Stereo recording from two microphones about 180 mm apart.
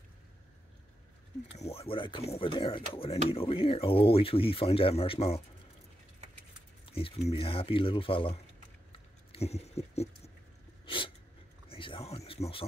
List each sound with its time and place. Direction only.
1.6 s speech: 35° left (ahead or behind)
6.9 s speech: 30° left (ahead or behind)
8.9 s a sound: 35° left (ahead or behind)